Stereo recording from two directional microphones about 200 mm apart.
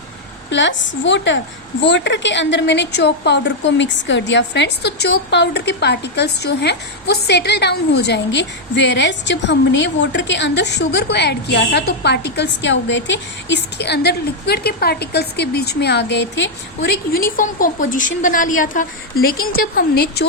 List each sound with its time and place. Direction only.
0.5 s a woman's voice: 65° left (ahead or behind)